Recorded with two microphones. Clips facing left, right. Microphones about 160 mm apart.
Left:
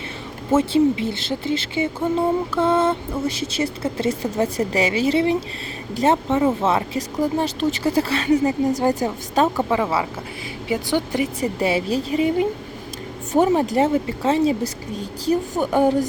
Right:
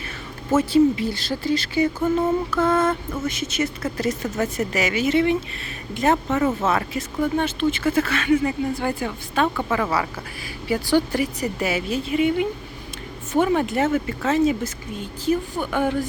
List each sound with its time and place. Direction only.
0.5 s speech: 25° left (ahead or behind)
9.6 s speech: 20° left (ahead or behind); by 16.0 s 35° left (ahead or behind)